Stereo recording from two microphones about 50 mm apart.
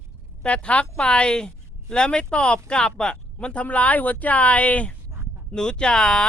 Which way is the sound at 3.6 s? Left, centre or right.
Left.